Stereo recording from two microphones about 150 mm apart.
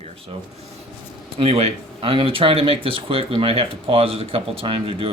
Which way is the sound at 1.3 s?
40° right (ahead or behind).